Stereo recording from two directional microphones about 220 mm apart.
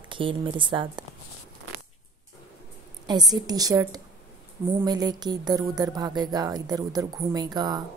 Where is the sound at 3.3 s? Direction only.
15° right (ahead or behind).